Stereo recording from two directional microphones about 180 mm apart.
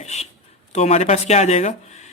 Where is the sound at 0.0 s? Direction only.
40° left (ahead or behind).